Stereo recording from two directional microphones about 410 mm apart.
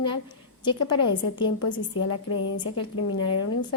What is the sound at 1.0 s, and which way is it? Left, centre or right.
A woman's voice, left.